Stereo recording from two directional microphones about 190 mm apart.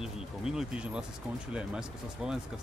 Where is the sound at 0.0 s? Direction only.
5° right (ahead or behind).